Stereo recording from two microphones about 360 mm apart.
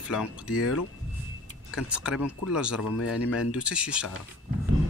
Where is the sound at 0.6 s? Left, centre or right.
Left.